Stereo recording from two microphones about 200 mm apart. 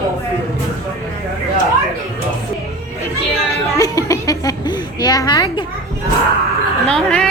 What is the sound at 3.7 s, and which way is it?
A woman's voice, 15° left (ahead or behind).